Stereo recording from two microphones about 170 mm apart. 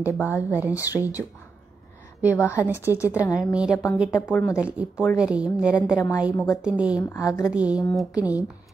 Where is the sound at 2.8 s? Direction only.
10° right (ahead or behind).